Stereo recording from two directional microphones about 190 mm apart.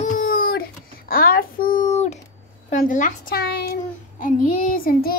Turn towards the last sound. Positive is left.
turn(degrees=50)  # may be behind; listen again after turning